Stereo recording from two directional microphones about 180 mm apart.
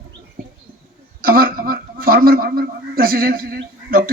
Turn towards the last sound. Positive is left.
turn(degrees=-55)  # may be behind; listen again after turning